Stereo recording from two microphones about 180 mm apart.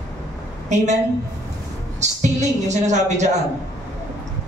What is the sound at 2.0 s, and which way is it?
A man's voice, 40° right (ahead or behind).